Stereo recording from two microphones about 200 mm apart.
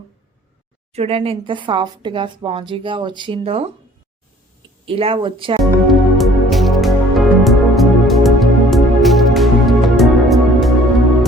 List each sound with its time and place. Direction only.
0.9 s speech: 30° right (ahead or behind)
4.9 s speech: 30° right (ahead or behind)
5.9 s music: centre (ahead or behind)